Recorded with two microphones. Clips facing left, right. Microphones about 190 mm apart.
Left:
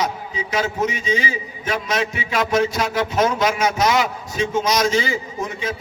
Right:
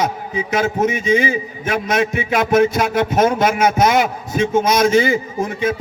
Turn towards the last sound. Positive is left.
turn(degrees=-50)  # may be behind; listen again after turning